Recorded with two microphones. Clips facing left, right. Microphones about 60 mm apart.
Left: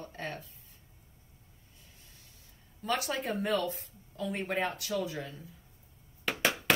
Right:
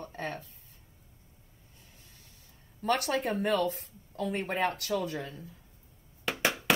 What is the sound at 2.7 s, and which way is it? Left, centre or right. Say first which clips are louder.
Speech: right 4 dB; right.